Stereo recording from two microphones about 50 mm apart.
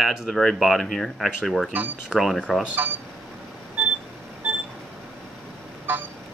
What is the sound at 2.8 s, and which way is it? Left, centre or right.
Speech, right.